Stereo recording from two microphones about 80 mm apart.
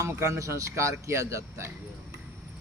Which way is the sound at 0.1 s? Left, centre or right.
Right.